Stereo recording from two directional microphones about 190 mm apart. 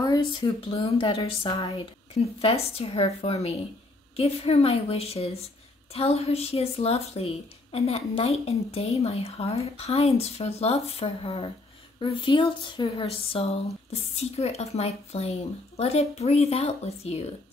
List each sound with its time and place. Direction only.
0.0 s a woman's voice: 20° left (ahead or behind)